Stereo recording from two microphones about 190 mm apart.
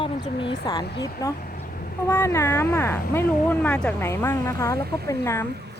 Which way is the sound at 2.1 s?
15° left (ahead or behind).